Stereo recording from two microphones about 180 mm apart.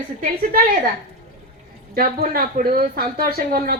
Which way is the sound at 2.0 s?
55° right (ahead or behind).